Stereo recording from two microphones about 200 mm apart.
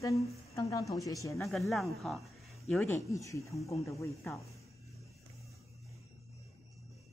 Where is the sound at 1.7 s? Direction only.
Centre (ahead or behind).